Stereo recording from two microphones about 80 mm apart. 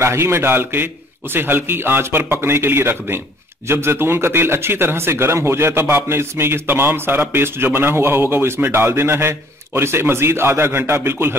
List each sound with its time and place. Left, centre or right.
0.0 s speech: right